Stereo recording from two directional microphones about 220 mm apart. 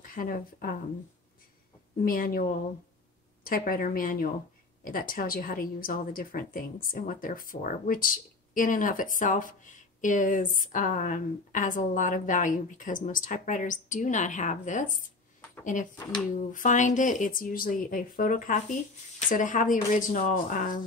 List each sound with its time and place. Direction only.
0.0 s speech: 40° left (ahead or behind)
2.0 s a woman's voice: 40° left (ahead or behind)